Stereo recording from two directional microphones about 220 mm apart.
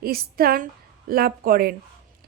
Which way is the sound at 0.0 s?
45° right (ahead or behind).